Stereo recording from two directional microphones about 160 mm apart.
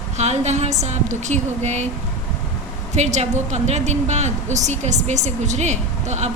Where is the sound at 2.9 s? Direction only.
45° right (ahead or behind).